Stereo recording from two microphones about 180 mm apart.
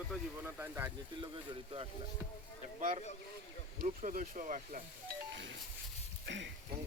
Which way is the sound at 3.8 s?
50° right (ahead or behind).